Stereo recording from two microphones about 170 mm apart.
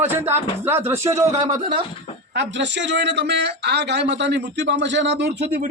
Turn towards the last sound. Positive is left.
turn(degrees=-85)